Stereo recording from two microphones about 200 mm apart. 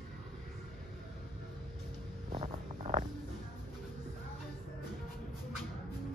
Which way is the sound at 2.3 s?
35° right (ahead or behind).